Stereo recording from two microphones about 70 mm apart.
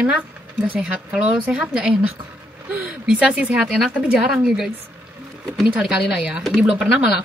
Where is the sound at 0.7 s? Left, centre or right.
Centre.